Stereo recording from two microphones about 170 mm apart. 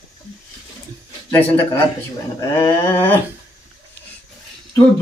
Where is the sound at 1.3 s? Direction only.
15° left (ahead or behind).